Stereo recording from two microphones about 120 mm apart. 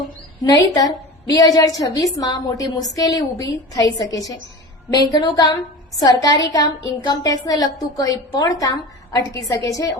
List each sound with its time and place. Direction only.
0.4 s a woman's voice: 30° left (ahead or behind)